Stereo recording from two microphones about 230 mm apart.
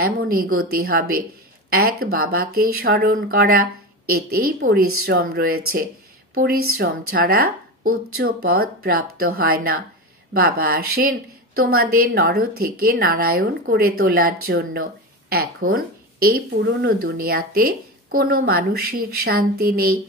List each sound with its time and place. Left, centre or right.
0.0 s a woman's voice: right